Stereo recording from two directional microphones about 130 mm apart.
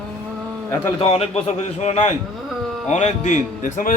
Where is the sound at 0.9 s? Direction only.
50° left (ahead or behind).